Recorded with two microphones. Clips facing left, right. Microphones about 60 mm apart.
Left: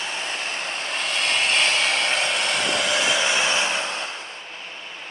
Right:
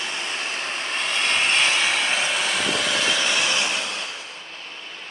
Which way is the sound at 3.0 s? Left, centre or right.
Centre.